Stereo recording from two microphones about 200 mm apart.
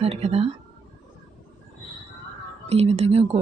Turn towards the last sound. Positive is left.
turn(degrees=-30)  # may be behind; listen again after turning